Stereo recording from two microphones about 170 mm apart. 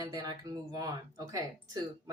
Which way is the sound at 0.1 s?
20° right (ahead or behind).